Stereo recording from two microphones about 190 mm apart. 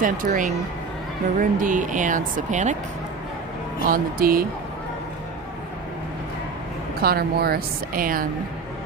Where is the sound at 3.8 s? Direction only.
50° right (ahead or behind).